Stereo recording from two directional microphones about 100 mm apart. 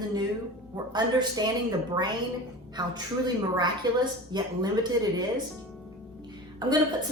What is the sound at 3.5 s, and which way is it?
A woman's voice, 45° right (ahead or behind).